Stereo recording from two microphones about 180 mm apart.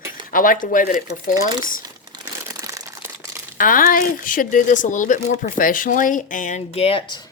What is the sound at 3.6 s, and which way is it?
Speech, 50° left (ahead or behind).